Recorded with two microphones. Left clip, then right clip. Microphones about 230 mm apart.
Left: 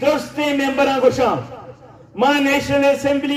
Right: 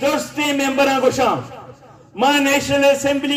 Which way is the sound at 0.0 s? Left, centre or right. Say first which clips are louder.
Left 1 dB; right.